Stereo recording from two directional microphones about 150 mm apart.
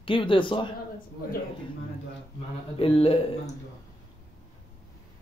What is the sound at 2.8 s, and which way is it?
Speech, 40° left (ahead or behind).